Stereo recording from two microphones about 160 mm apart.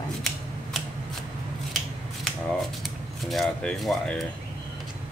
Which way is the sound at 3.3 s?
Centre (ahead or behind).